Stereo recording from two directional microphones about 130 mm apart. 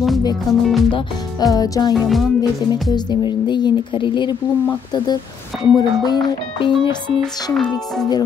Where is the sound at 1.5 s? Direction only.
30° left (ahead or behind).